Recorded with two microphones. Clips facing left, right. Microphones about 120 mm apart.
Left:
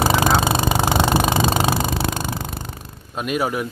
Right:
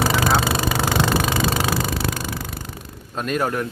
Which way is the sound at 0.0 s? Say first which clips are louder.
Left 2 dB; 20° left (ahead or behind).